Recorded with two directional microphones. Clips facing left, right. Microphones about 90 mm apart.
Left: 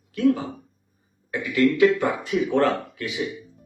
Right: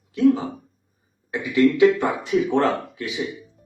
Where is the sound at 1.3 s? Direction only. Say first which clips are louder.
Right 2 dB; 20° right (ahead or behind).